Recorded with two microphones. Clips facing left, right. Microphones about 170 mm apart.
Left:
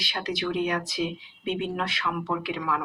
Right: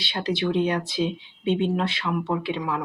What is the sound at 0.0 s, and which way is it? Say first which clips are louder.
Speech: right 4 dB; 30° right (ahead or behind).